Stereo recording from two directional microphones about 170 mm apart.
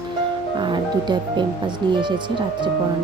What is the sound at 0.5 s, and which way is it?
Speech, 25° right (ahead or behind).